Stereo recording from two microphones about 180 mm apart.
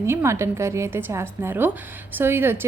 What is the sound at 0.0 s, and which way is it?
A woman's voice, 15° right (ahead or behind).